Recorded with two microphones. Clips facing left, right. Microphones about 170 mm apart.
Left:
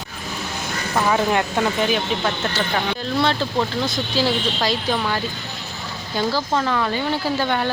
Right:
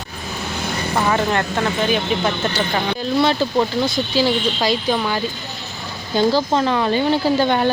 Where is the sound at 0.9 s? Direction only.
5° left (ahead or behind).